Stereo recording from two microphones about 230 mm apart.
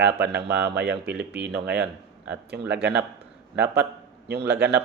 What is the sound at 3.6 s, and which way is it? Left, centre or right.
A man's voice, right.